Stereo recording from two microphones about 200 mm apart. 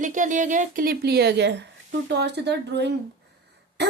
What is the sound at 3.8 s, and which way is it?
Throat clearing, 60° right (ahead or behind).